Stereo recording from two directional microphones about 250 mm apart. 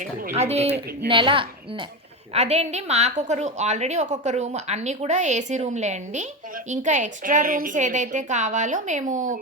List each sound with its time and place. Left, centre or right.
0.3 s a woman's voice: right